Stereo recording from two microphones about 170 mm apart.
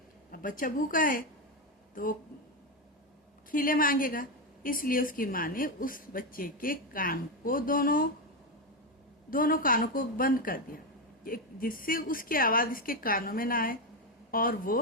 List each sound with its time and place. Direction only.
0.3 s speech: 55° left (ahead or behind)
3.5 s a woman's voice: 55° left (ahead or behind)
9.3 s a woman's voice: 55° left (ahead or behind)